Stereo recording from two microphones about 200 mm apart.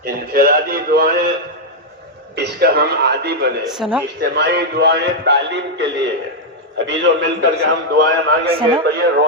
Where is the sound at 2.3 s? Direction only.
55° right (ahead or behind).